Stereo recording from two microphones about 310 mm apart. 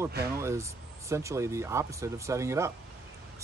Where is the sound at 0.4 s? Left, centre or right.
Centre.